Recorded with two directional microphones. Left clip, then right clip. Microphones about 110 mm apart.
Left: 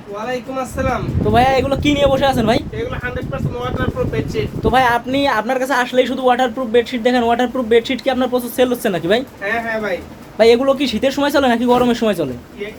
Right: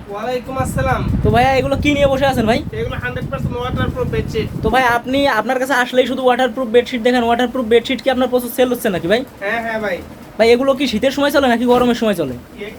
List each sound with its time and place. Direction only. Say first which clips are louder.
1.3 s speech: even; centre (ahead or behind)
3.6 s speech: left 1 dB; 15° right (ahead or behind)
4.6 s speech: even; 5° right (ahead or behind)
10.3 s speech: even; 5° right (ahead or behind)